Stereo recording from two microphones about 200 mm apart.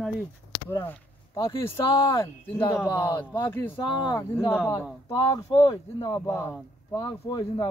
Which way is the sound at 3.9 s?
20° left (ahead or behind).